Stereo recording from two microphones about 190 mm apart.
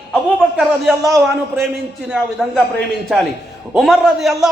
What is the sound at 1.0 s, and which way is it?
Speech, 15° right (ahead or behind).